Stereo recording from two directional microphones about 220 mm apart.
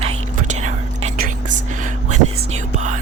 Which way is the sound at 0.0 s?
30° right (ahead or behind).